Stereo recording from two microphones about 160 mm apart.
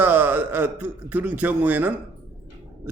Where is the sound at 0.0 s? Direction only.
10° right (ahead or behind).